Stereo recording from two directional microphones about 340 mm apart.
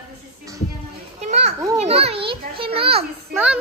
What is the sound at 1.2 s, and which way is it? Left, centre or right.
A child's voice, centre.